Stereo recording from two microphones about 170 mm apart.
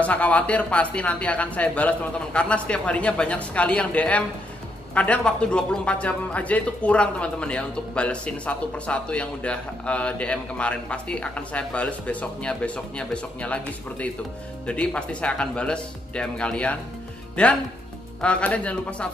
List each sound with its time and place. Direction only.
0.0 s speech: 10° left (ahead or behind)